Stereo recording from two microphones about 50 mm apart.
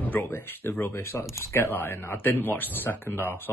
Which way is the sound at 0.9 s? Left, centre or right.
Left.